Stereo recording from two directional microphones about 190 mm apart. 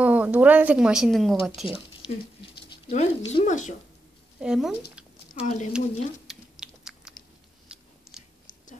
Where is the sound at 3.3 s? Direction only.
35° left (ahead or behind).